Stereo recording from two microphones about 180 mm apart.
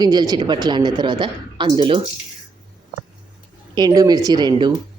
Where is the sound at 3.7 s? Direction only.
25° right (ahead or behind).